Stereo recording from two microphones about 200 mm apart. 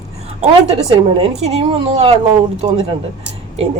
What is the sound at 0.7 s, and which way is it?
Speech, 30° right (ahead or behind).